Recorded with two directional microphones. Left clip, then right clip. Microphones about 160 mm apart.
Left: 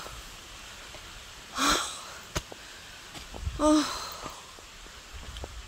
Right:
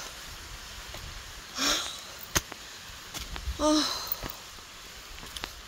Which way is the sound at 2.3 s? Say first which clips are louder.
Right 6 dB; 90° right.